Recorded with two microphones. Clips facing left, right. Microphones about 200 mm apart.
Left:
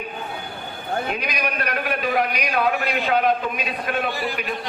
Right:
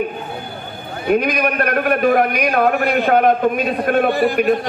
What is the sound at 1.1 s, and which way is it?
A man's voice, 50° right (ahead or behind).